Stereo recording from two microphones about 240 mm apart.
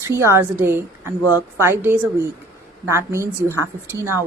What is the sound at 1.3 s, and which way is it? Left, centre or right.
Speech, centre.